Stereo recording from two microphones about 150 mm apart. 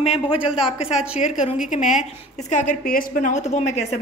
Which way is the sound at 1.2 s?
55° left (ahead or behind).